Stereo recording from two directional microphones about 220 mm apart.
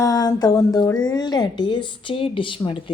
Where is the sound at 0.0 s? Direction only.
15° left (ahead or behind).